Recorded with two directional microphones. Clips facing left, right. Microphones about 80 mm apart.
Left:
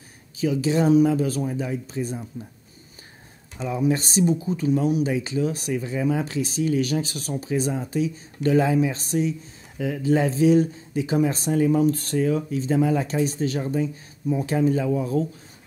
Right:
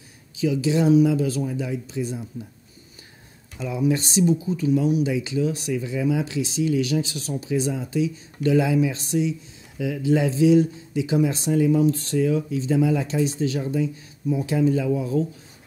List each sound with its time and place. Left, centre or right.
0.4 s speech: left
3.5 s speech: left